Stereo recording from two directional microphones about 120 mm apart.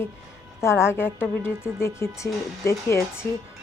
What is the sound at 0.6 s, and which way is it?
A woman's voice, 20° left (ahead or behind).